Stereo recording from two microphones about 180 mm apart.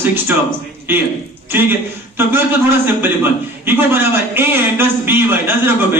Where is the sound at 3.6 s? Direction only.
10° right (ahead or behind).